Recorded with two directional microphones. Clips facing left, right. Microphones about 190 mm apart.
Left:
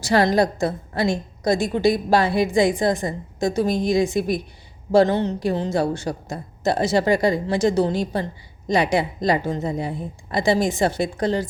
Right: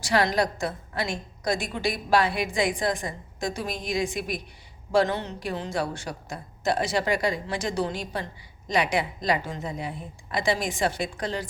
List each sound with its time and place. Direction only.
0.0 s a woman's voice: 30° left (ahead or behind)
4.9 s a woman's voice: 35° left (ahead or behind)
5.5 s a woman's voice: 25° left (ahead or behind)